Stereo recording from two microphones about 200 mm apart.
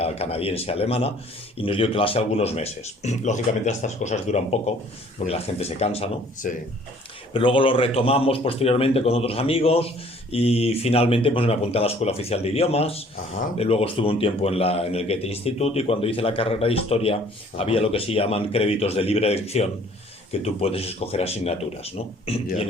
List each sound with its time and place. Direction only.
0.0 s a man's voice: 30° left (ahead or behind)